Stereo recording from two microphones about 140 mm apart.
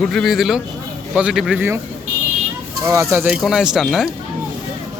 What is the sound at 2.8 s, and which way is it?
Speech, 20° right (ahead or behind).